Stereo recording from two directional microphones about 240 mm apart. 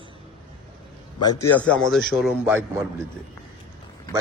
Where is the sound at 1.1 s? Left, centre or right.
Centre.